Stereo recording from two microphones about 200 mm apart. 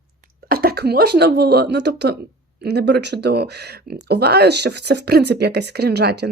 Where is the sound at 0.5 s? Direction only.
50° right (ahead or behind).